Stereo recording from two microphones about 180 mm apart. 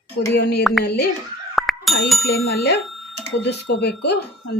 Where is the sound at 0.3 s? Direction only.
65° left (ahead or behind).